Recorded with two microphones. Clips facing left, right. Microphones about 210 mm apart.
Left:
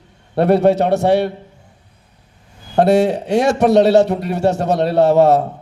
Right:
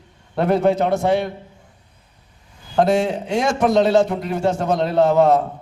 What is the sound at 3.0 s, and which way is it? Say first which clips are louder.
A man's voice: left 5 dB; 40° left (ahead or behind).